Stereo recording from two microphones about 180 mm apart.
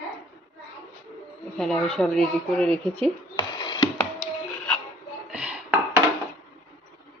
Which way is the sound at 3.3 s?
25° left (ahead or behind).